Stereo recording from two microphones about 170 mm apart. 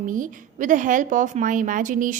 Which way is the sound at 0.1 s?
50° right (ahead or behind).